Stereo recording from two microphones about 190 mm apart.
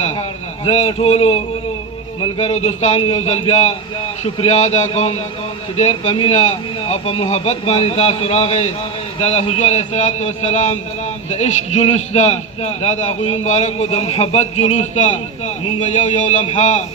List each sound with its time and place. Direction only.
0.6 s a man's voice: 35° left (ahead or behind)